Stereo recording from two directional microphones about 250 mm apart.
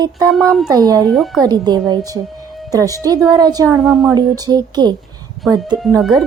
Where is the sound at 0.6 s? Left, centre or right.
Centre.